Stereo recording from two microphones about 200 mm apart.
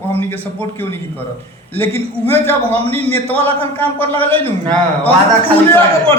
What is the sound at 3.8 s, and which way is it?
Speech, 10° left (ahead or behind).